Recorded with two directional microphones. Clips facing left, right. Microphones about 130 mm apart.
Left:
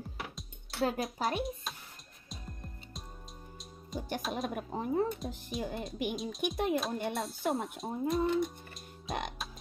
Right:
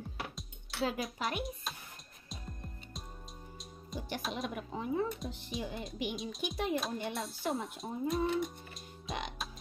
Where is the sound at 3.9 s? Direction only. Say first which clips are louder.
Left 3 dB; 45° left (ahead or behind).